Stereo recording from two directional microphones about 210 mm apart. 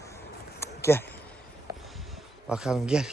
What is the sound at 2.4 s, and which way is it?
Speech, 5° right (ahead or behind).